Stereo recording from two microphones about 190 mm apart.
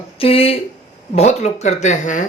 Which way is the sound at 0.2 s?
30° left (ahead or behind).